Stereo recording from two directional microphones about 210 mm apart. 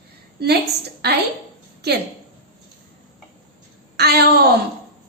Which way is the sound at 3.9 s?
50° right (ahead or behind).